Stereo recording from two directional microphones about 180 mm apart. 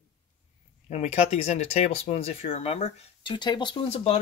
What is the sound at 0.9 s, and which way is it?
Speech, 35° left (ahead or behind).